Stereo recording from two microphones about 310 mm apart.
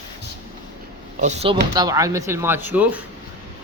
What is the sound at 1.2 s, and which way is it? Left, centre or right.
A man's voice, right.